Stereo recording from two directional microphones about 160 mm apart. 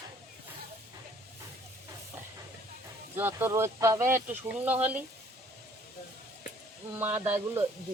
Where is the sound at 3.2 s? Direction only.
15° right (ahead or behind).